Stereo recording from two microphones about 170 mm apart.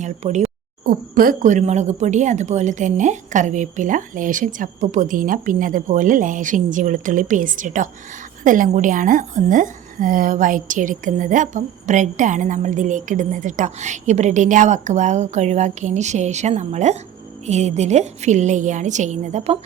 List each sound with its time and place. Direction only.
0.0 s a woman's voice: 45° right (ahead or behind)
0.9 s a woman's voice: 55° right (ahead or behind)